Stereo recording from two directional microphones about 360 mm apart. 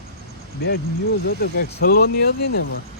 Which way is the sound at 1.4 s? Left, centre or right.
Left.